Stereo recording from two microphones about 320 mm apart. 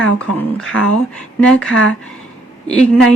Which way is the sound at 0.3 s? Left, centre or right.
Centre.